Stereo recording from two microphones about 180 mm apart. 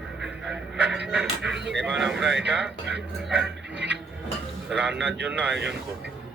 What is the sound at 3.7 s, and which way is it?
Music, 75° right (ahead or behind).